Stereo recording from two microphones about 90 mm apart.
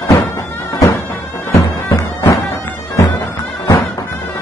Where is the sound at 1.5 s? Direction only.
30° left (ahead or behind).